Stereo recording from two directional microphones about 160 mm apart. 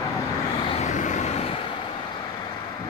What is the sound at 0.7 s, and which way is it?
Vehicle, 45° left (ahead or behind).